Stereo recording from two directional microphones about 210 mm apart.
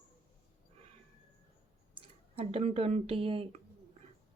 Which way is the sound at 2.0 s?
25° right (ahead or behind).